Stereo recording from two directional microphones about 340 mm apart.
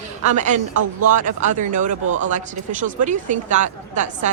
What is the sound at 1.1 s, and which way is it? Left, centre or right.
Speech, right.